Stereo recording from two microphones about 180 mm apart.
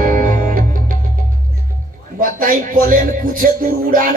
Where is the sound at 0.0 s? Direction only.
50° right (ahead or behind).